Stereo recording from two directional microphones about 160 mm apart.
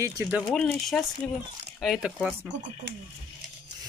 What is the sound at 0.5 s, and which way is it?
Speech, 5° left (ahead or behind).